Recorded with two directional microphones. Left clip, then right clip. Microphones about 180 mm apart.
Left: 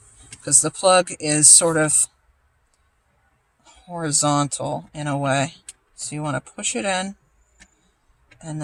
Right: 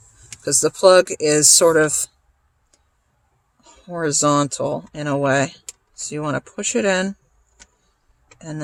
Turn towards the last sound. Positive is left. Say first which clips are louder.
# right 4 dB
turn(degrees=-45)  # may be behind; listen again after turning